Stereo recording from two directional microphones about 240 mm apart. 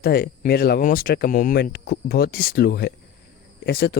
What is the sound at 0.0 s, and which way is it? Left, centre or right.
Speech, left.